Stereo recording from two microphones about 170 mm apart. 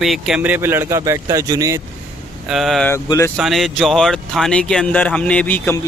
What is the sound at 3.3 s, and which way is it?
Speech, centre (ahead or behind).